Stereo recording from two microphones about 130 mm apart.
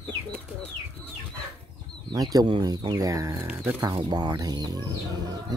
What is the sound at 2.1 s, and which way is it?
Speech, 30° right (ahead or behind).